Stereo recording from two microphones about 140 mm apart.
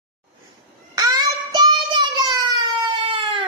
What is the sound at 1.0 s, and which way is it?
Child singing, 30° right (ahead or behind).